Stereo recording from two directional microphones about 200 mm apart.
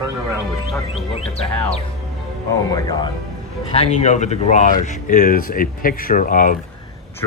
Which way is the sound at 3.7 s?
35° left (ahead or behind).